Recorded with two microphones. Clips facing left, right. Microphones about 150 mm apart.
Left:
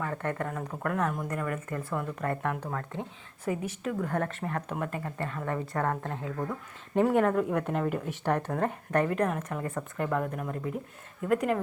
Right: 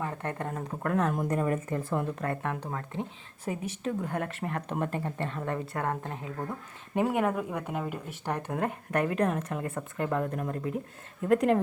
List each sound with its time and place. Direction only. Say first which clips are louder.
0.0 s speech: left 2 dB; 25° right (ahead or behind)
6.9 s speech: left 3 dB; 10° right (ahead or behind)